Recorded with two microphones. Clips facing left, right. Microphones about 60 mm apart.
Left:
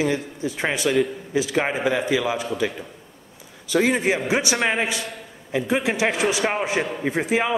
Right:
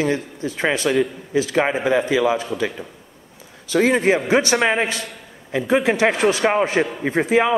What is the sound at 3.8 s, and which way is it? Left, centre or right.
Speech, right.